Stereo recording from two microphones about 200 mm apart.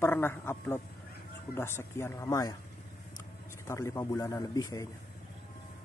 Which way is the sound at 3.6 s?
15° left (ahead or behind).